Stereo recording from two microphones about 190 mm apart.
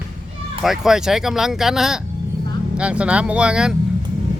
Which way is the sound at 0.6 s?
Centre (ahead or behind).